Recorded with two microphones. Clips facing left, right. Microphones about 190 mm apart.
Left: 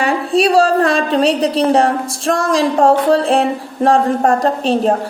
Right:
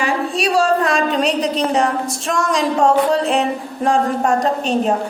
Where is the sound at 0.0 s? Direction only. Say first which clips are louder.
Left 5 dB; 30° left (ahead or behind).